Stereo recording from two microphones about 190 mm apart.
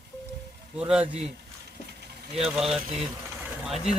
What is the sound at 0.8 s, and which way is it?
Speech, 5° right (ahead or behind).